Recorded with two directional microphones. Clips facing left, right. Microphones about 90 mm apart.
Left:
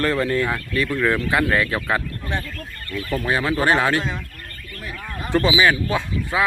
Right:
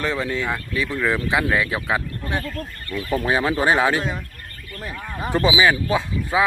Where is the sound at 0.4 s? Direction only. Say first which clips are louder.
Left 2 dB; 5° right (ahead or behind).